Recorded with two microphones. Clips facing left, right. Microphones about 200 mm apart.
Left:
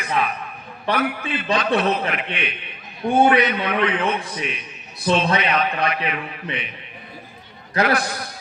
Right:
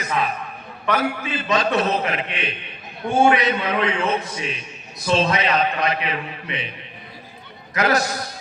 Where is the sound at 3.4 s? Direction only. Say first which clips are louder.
Left 2 dB; 30° right (ahead or behind).